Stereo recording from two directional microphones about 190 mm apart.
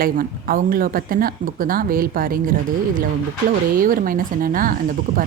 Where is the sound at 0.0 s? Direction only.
50° right (ahead or behind).